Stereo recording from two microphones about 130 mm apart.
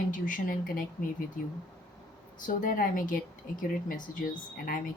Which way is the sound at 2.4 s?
90° left.